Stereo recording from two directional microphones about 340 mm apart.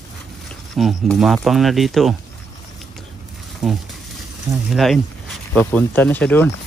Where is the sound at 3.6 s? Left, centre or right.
Centre.